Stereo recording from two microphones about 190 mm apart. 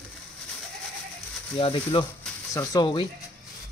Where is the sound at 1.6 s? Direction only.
25° left (ahead or behind).